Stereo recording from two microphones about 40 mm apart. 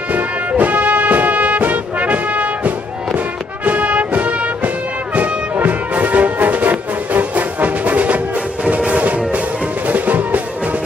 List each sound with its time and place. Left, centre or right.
0.1 s music: right